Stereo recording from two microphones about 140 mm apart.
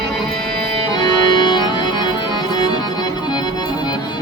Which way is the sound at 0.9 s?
30° left (ahead or behind).